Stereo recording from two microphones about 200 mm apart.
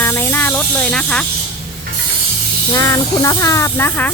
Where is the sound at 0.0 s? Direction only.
10° left (ahead or behind).